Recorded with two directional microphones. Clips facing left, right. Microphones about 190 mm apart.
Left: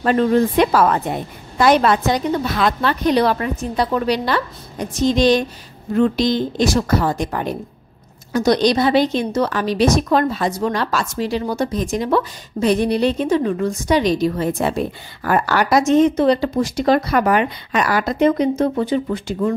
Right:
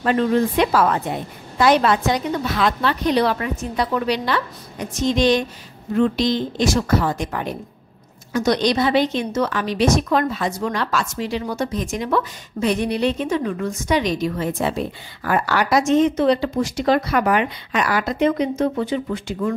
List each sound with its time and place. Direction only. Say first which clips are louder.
0.0 s a woman's voice: left 3 dB; 45° left (ahead or behind)
14.6 s a woman's voice: left 2 dB; 50° left (ahead or behind)